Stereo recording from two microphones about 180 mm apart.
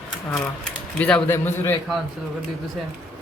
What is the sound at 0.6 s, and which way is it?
Speech, 5° left (ahead or behind).